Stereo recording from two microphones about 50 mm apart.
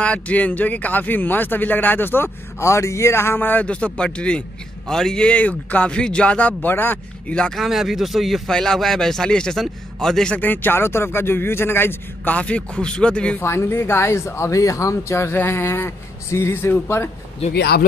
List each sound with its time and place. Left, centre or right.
0.0 s speech: left
2.6 s speech: left
3.6 s a man's voice: left
5.3 s speech: left
6.7 s a man's voice: left
7.2 s speech: centre
7.5 s speech: centre
8.5 s a man's voice: centre
10.4 s a man's voice: left
12.3 s speech: left
13.4 s speech: left
15.3 s speech: left